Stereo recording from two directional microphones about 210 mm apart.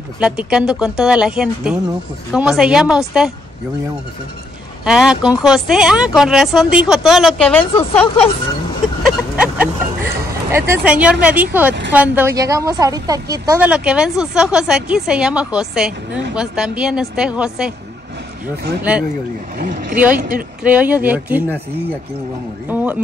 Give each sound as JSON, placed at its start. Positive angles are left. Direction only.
{"t": 0.2, "sound": "a woman's voice", "side_deg": -5}
{"t": 4.8, "sound": "a woman's voice", "side_deg": -5}
{"t": 9.0, "sound": "vehicle", "side_deg": -5}
{"t": 10.5, "sound": "a woman's voice", "side_deg": -10}
{"t": 18.8, "sound": "speech", "side_deg": -5}
{"t": 19.6, "sound": "speech", "side_deg": -40}
{"t": 20.6, "sound": "speech", "side_deg": -5}
{"t": 22.7, "sound": "speech", "side_deg": -10}